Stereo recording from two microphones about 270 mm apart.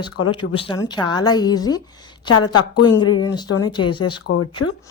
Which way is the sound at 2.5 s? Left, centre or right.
Left.